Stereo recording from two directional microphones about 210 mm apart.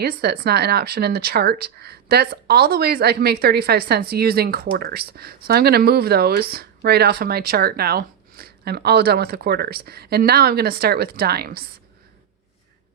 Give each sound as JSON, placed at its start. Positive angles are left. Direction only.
{"t": 0.0, "sound": "speech", "side_deg": -50}